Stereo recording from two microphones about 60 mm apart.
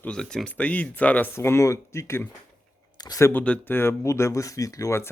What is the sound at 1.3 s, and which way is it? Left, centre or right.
Speech, left.